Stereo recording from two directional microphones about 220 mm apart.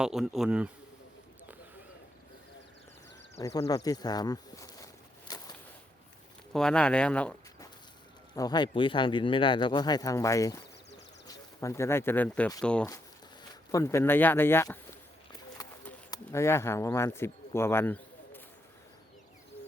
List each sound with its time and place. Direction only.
0.0 s speech: centre (ahead or behind)
3.4 s speech: 15° left (ahead or behind)
5.3 s a sound: 15° left (ahead or behind)
6.5 s speech: 5° left (ahead or behind)
8.4 s speech: 20° left (ahead or behind)
16.0 s speech: 15° left (ahead or behind)